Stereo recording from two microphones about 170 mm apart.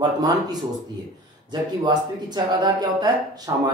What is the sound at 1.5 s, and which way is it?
Speech, 25° right (ahead or behind).